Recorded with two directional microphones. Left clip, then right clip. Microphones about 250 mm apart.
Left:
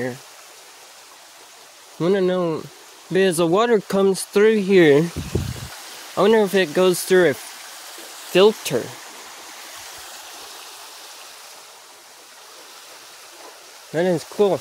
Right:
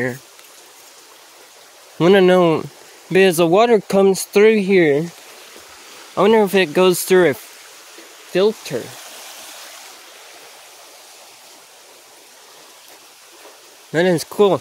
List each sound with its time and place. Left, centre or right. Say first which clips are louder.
2.0 s speech: right 8 dB; right
4.7 s speech: left 1 dB; centre
6.1 s speech: right 3 dB; centre
8.3 s speech: left 2 dB; centre
13.9 s speech: right 4 dB; right